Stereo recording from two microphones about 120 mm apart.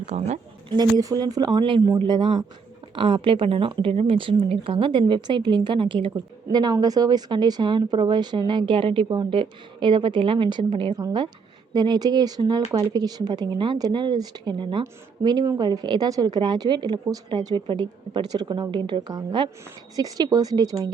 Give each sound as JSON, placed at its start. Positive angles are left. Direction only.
{"t": 0.0, "sound": "speech", "side_deg": -70}
{"t": 0.8, "sound": "speech", "side_deg": -30}